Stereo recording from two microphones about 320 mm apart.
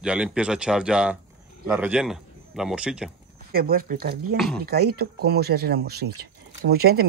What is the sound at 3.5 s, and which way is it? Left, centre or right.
Speech, right.